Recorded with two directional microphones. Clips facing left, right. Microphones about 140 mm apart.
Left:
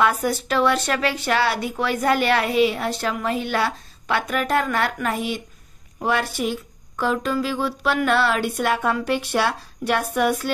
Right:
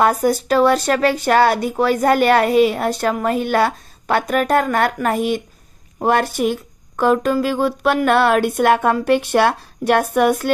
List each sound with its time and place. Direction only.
0.0 s speech: 40° right (ahead or behind)